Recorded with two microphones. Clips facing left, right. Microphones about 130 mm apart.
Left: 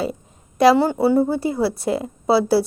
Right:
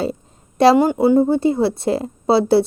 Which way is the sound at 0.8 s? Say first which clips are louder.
Right 3 dB; 15° right (ahead or behind).